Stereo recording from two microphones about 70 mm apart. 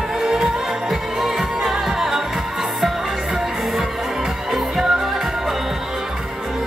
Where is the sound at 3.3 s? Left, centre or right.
Centre.